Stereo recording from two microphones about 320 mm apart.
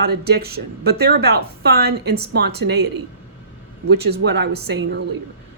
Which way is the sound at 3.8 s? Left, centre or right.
Right.